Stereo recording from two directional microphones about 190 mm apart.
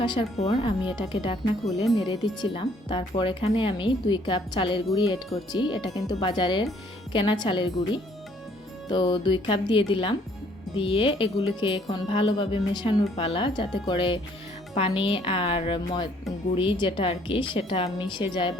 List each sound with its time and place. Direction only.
0.0 s music: 25° left (ahead or behind)
1.8 s speech: centre (ahead or behind)
2.4 s music: 25° left (ahead or behind)